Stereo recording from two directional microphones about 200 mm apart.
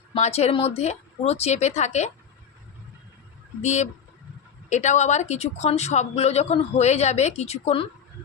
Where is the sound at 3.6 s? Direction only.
35° left (ahead or behind).